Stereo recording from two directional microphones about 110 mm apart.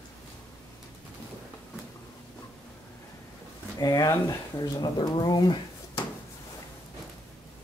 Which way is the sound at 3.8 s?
35° left (ahead or behind).